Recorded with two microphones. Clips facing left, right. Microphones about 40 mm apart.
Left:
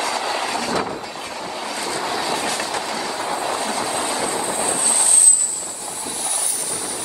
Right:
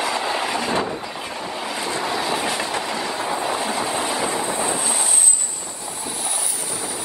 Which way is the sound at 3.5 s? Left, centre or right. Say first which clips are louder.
Even; centre.